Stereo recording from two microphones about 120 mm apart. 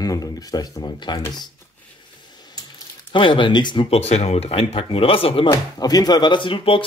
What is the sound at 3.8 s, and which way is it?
Speech, 60° left (ahead or behind).